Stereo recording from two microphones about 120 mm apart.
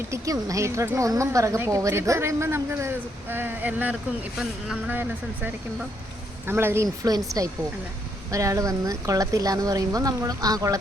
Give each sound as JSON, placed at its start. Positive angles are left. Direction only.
{"t": 0.1, "sound": "a woman's voice", "side_deg": -25}
{"t": 6.8, "sound": "a woman's voice", "side_deg": -30}